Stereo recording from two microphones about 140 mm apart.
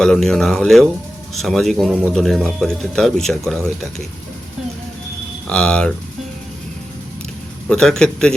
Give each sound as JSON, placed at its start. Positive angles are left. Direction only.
{"t": 0.0, "sound": "speech", "side_deg": 5}
{"t": 5.5, "sound": "speech", "side_deg": 5}
{"t": 7.7, "sound": "speech", "side_deg": 5}